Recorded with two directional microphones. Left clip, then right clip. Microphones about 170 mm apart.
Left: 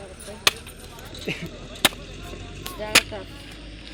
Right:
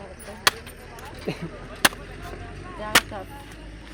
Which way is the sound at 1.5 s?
45° left (ahead or behind).